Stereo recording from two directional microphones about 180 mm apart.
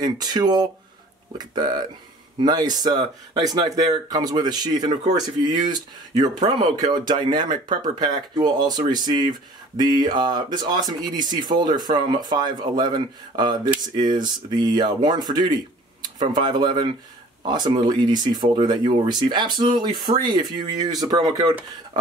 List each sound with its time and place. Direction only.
0.0 s speech: 20° right (ahead or behind)